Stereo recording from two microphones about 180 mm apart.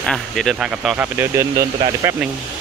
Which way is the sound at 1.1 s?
15° right (ahead or behind).